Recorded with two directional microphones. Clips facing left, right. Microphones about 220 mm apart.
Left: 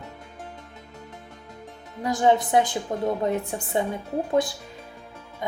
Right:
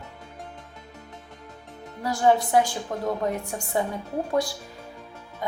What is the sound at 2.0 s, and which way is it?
Speech, 20° left (ahead or behind).